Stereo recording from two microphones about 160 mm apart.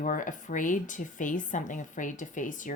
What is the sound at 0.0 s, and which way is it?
A woman's voice, 55° left (ahead or behind).